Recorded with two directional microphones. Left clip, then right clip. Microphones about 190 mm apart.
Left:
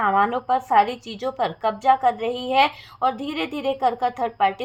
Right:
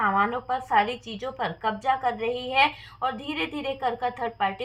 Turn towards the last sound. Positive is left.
turn(degrees=40)  # may be behind; listen again after turning